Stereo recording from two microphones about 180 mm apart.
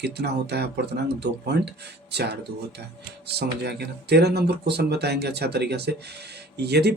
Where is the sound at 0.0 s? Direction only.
65° right (ahead or behind).